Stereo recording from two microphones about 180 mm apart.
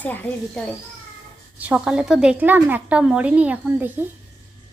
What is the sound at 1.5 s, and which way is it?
A woman's voice, 5° right (ahead or behind).